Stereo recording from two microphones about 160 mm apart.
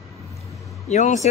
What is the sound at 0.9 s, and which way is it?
Speech, 45° left (ahead or behind).